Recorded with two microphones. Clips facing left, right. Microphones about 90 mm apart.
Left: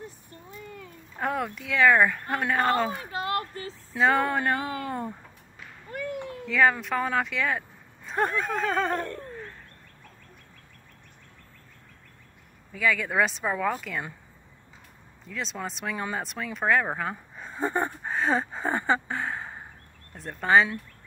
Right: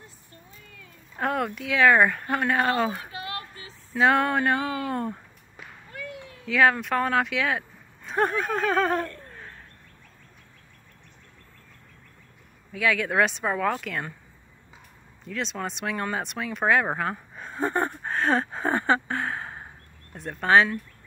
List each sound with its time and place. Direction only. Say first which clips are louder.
1.1 s speech: right 2 dB; centre (ahead or behind)
3.1 s a sound: left 6 dB; 40° left (ahead or behind)
3.9 s speech: right 2 dB; centre (ahead or behind)
5.9 s whip: left 7 dB; 45° left (ahead or behind)
6.4 s speech: right 2 dB; centre (ahead or behind)
12.7 s speech: right 2 dB; centre (ahead or behind)
15.2 s speech: right 3 dB; 5° left (ahead or behind)